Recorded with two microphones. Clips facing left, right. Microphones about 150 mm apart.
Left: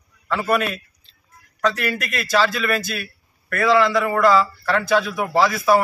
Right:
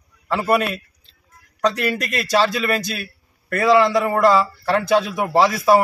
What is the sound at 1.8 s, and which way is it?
A man's voice, 30° right (ahead or behind).